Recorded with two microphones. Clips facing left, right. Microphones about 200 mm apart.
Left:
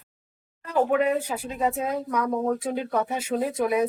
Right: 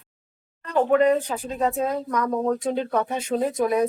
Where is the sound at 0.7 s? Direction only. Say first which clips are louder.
Right 4 dB; 5° left (ahead or behind).